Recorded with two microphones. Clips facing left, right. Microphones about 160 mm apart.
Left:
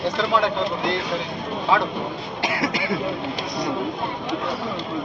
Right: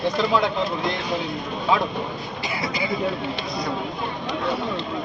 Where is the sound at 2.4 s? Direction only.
90° left.